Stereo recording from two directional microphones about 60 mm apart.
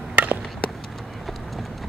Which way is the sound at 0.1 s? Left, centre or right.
Right.